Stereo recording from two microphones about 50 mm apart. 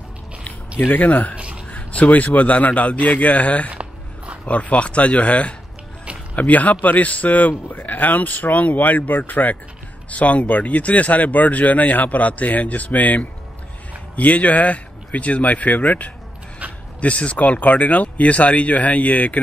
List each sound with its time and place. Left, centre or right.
0.7 s speech: left
1.0 s speech: left
1.3 s a sound: right
1.7 s speech: left